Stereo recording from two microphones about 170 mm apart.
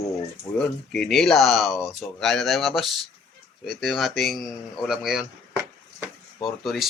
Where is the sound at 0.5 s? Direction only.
5° left (ahead or behind).